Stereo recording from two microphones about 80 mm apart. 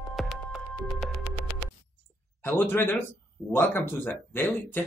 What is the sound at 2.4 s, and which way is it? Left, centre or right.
Speech, left.